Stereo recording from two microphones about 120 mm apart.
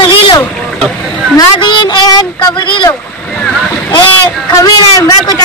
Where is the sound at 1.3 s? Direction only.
40° left (ahead or behind).